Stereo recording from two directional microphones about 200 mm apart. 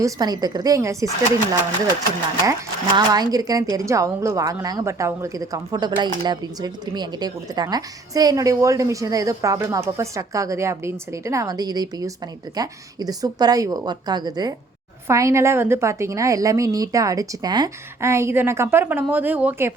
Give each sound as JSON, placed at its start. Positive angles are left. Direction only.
{"t": 0.0, "sound": "speech", "side_deg": -20}
{"t": 2.5, "sound": "speech", "side_deg": -20}